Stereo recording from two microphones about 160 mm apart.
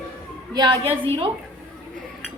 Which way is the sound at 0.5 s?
30° right (ahead or behind).